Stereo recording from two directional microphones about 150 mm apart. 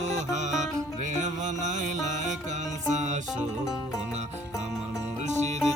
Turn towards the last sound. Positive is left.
turn(degrees=-50)  # may be behind; listen again after turning